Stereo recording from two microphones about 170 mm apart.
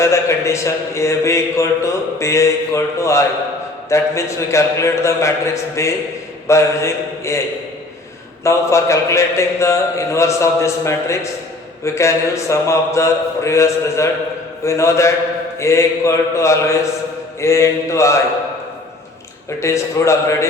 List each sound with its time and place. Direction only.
0.0 s a man's voice: 15° left (ahead or behind)
8.4 s a man's voice: 15° left (ahead or behind)
19.5 s a man's voice: 15° left (ahead or behind)